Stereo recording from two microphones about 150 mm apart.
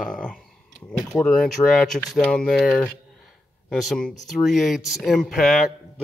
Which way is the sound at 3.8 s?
5° left (ahead or behind).